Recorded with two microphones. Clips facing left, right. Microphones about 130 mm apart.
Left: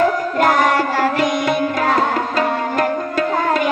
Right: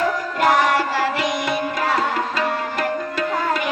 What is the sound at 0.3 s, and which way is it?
Music, 50° left (ahead or behind).